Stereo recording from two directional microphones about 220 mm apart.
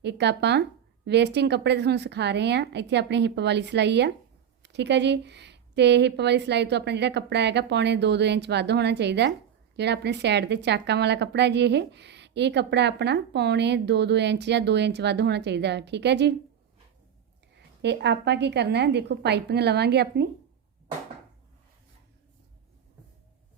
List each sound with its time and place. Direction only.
0.0 s speech: 50° right (ahead or behind)
17.8 s speech: 50° right (ahead or behind)